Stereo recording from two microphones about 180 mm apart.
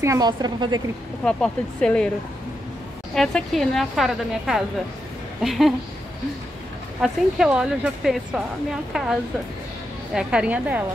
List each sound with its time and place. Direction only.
0.0 s a woman's voice: 20° right (ahead or behind)
1.2 s a woman's voice: 5° left (ahead or behind)
3.2 s a woman's voice: centre (ahead or behind)
7.0 s a woman's voice: 5° right (ahead or behind)
10.1 s a woman's voice: 5° right (ahead or behind)